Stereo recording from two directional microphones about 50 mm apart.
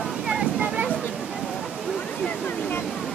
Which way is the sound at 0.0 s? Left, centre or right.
Centre.